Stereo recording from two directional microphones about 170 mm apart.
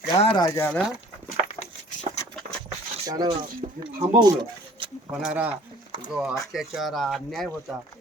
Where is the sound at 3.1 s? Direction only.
25° right (ahead or behind).